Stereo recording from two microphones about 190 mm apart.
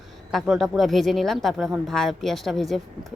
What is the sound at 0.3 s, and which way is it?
A woman's voice, centre (ahead or behind).